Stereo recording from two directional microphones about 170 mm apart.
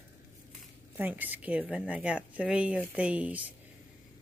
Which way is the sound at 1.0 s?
10° right (ahead or behind).